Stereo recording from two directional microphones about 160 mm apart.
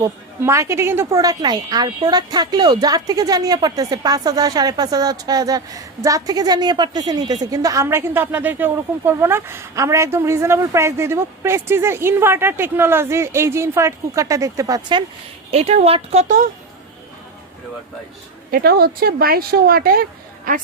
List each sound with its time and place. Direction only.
0.0 s a woman's voice: 20° right (ahead or behind)
15.5 s speech: 40° right (ahead or behind)
18.5 s speech: 70° right (ahead or behind)